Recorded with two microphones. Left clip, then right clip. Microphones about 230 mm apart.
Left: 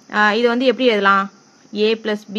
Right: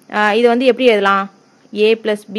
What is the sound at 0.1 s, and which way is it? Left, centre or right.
Speech, centre.